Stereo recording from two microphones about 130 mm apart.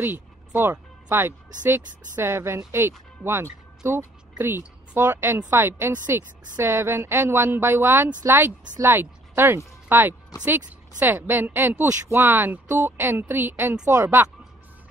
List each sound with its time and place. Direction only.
0.0 s music: 15° right (ahead or behind)
2.1 s speech: 20° right (ahead or behind)
3.8 s speech: 20° right (ahead or behind)
10.3 s speech: 30° left (ahead or behind)
11.0 s speech: 15° right (ahead or behind)